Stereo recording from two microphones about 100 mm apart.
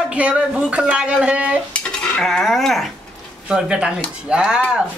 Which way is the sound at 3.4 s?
10° right (ahead or behind).